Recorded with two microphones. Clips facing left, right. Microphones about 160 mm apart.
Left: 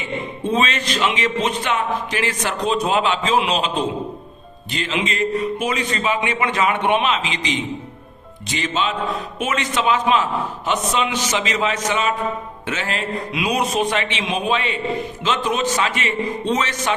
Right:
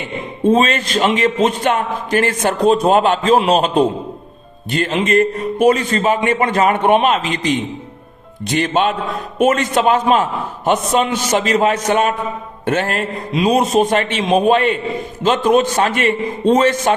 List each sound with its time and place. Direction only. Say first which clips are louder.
0.5 s a man's voice: right 4 dB; 45° right (ahead or behind)
13.3 s a man's voice: right 8 dB; 40° right (ahead or behind)